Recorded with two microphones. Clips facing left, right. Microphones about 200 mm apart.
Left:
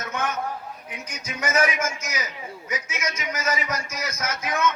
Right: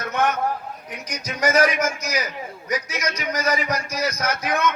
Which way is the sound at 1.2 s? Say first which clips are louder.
Right 5 dB; 35° right (ahead or behind).